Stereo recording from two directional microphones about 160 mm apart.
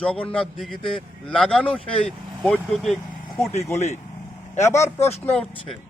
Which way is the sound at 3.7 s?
45° left (ahead or behind).